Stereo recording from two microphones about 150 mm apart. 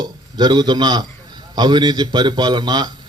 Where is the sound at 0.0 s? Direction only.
30° right (ahead or behind).